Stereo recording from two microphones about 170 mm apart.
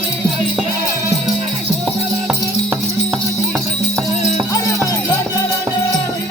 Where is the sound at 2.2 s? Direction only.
Centre (ahead or behind).